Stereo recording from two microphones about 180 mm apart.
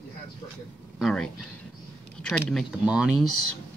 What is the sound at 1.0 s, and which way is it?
Speech, 5° left (ahead or behind).